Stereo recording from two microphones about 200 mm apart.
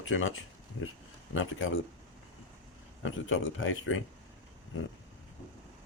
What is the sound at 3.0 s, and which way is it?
Speech, 75° left (ahead or behind).